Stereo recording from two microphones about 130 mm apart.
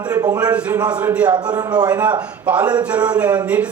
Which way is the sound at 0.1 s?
25° right (ahead or behind).